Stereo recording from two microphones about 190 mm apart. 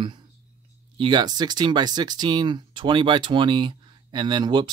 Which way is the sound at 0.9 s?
25° right (ahead or behind).